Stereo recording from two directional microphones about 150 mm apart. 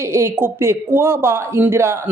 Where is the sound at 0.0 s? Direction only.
20° right (ahead or behind).